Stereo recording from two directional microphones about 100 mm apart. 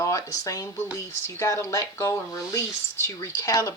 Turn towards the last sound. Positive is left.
turn(degrees=35)  # may be behind; listen again after turning